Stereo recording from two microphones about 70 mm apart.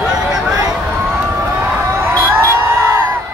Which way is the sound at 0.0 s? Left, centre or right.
Centre.